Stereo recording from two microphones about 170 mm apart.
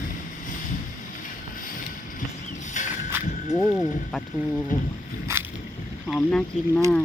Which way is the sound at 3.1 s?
10° right (ahead or behind).